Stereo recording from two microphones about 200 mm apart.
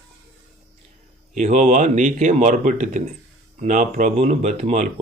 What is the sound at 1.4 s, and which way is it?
Speech, 35° right (ahead or behind).